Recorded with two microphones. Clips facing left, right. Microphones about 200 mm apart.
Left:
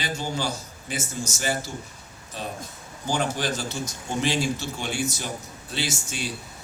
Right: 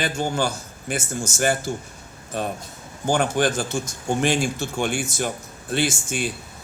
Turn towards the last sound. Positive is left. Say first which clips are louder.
# right 6 dB
turn(degrees=-55)  # may be behind; listen again after turning